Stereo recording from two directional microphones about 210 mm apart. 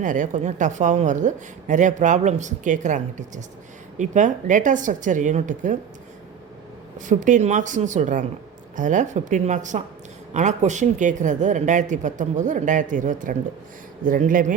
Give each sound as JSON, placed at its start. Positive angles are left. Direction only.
{"t": 0.0, "sound": "a woman's voice", "side_deg": -35}
{"t": 7.0, "sound": "a woman's voice", "side_deg": -35}